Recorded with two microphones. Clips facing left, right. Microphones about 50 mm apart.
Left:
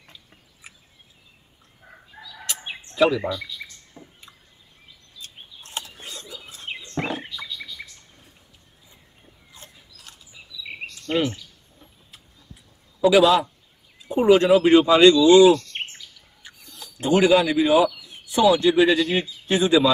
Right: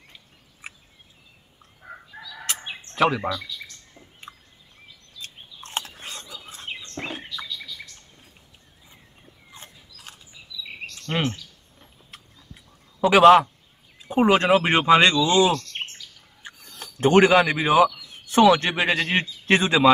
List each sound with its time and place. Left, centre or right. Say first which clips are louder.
2.9 s bird: left 2 dB; right
3.3 s bird: left 1 dB; centre
5.8 s a sound: right 2 dB; right
6.7 s wild animals: left 1 dB; centre
7.2 s chirp: even; centre
9.5 s a sound: right 2 dB; right
11.1 s speech: left 3 dB; right
13.0 s a man's voice: right 3 dB; right
13.9 s speech: left 3 dB; right
15.7 s chirp: left 1 dB; centre
16.7 s a sound: right 3 dB; right
17.3 s speech: left 1 dB; right
18.2 s a man's voice: right 1 dB; right
19.4 s speech: right 1 dB; right